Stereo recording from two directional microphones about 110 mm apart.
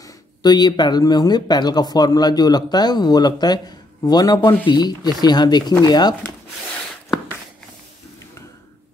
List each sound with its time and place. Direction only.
0.0 s speech: 40° left (ahead or behind)